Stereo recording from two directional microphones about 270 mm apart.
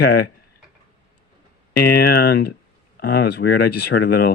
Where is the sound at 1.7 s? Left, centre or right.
Left.